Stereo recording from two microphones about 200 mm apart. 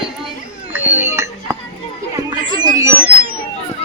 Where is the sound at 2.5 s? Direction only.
20° right (ahead or behind).